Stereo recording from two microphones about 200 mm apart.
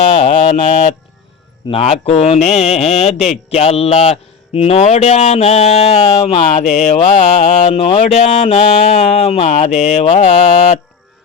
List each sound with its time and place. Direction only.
0.0 s speech: 30° left (ahead or behind)